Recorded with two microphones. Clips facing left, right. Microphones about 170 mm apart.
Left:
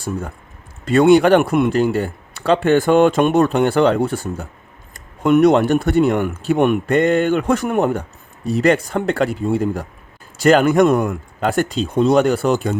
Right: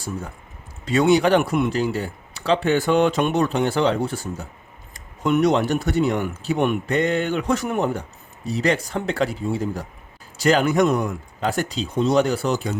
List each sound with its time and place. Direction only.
0.9 s speech: 55° left (ahead or behind)